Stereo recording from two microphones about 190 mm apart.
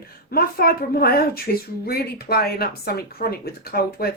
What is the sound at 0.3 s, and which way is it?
Speech, 55° left (ahead or behind).